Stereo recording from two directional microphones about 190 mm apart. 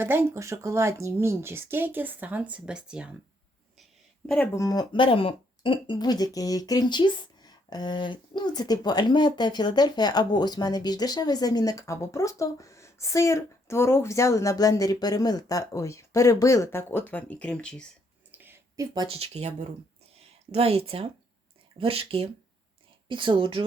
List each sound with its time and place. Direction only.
0.0 s speech: 10° right (ahead or behind)
4.3 s speech: 10° left (ahead or behind)
18.3 s a sound: 10° right (ahead or behind)
19.1 s speech: 35° right (ahead or behind)